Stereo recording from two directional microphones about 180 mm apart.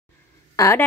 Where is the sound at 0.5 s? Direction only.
15° left (ahead or behind).